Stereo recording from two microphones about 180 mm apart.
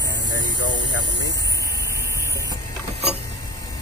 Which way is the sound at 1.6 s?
15° right (ahead or behind).